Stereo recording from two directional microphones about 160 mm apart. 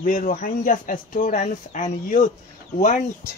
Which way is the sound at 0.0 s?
60° left (ahead or behind).